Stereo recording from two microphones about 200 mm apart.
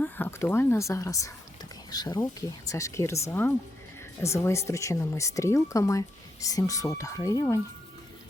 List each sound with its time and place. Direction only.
0.0 s speech: 10° left (ahead or behind)